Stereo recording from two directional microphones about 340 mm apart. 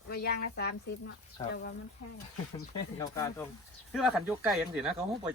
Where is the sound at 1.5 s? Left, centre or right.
Left.